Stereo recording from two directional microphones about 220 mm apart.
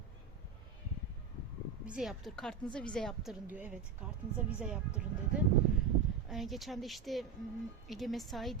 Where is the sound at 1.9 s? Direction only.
Centre (ahead or behind).